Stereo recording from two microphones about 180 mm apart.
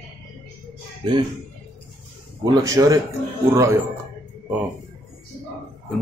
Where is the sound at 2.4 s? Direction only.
20° right (ahead or behind).